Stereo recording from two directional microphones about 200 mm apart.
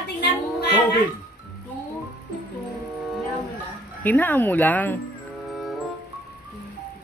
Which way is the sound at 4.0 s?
10° left (ahead or behind).